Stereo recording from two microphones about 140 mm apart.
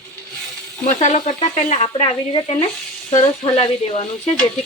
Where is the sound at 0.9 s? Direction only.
60° left (ahead or behind).